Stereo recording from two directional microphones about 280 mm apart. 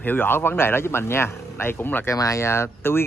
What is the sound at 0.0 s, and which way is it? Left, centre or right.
A man's voice, centre.